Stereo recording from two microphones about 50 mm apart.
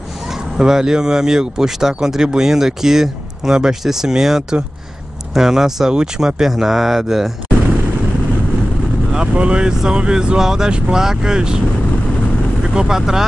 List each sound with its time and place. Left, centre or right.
0.6 s speech: centre
9.1 s speech: centre
12.7 s speech: centre